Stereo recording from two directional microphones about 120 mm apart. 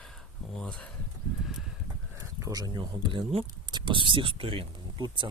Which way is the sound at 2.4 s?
30° right (ahead or behind).